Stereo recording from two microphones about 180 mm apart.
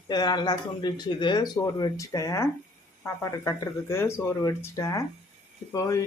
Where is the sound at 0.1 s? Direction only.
25° left (ahead or behind).